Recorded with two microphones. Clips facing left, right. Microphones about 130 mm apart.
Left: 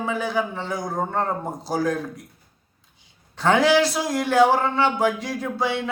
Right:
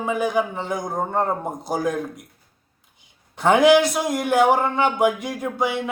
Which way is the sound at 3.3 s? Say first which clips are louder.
Right 3 dB; 20° right (ahead or behind).